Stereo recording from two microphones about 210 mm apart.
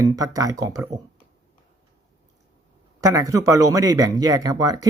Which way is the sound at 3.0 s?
15° right (ahead or behind).